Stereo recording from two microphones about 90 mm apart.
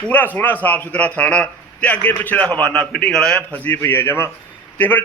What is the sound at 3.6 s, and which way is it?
A man's voice, 25° left (ahead or behind).